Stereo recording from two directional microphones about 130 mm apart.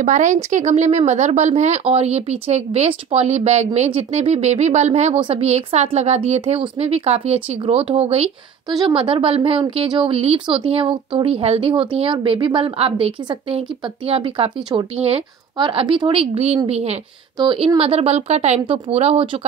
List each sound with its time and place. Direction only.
0.0 s speech: 70° right (ahead or behind)
5.2 s speech: 50° right (ahead or behind)
8.6 s speech: 35° right (ahead or behind); by 17.0 s 55° right (ahead or behind)
17.4 s speech: 40° right (ahead or behind)
17.7 s speech: 50° right (ahead or behind)